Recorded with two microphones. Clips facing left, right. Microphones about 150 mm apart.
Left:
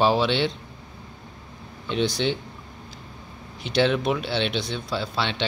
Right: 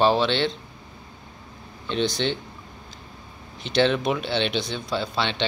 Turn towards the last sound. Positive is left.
turn(degrees=5)  # may be behind; listen again after turning